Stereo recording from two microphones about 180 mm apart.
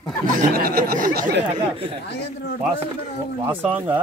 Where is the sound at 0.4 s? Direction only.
55° right (ahead or behind).